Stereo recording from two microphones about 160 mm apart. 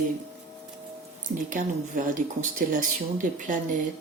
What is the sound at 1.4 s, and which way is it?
Speech, 55° right (ahead or behind).